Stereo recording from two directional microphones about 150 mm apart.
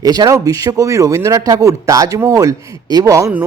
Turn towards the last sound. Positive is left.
turn(degrees=-20)  # may be behind; listen again after turning